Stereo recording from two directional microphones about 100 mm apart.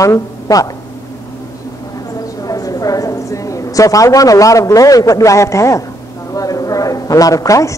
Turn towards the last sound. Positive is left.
turn(degrees=35)  # may be behind; listen again after turning